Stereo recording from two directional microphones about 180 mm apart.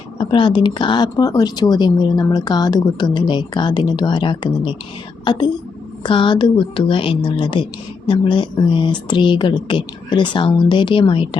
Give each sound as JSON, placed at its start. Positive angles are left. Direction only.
{"t": 0.2, "sound": "a woman's voice", "side_deg": 25}